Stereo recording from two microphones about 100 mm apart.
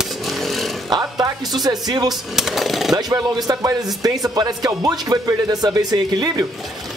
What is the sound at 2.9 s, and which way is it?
Speech, 40° right (ahead or behind).